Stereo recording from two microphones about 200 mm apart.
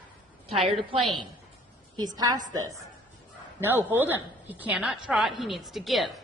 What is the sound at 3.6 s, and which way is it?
A woman's voice, 10° right (ahead or behind).